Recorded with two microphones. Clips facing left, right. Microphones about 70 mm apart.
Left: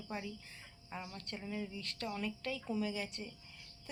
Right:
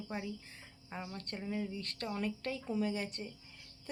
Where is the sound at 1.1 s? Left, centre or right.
Right.